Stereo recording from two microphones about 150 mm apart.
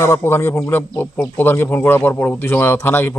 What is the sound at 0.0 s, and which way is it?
A man's voice, 20° left (ahead or behind).